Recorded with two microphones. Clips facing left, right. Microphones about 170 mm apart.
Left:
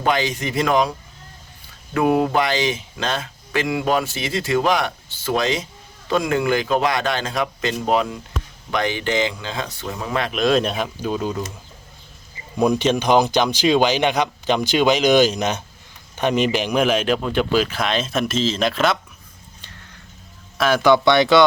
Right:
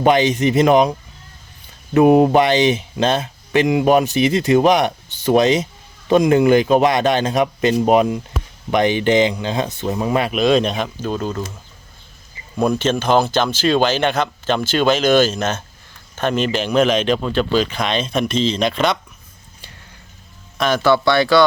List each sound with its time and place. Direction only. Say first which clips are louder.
0.0 s speech: right 7 dB; 20° right (ahead or behind); by 11.5 s 5° left (ahead or behind)
12.6 s speech: even; 15° left (ahead or behind)
20.6 s speech: even; 10° left (ahead or behind)